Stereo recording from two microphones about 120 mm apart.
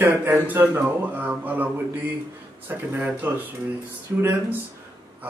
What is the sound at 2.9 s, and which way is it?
Speech, 15° right (ahead or behind).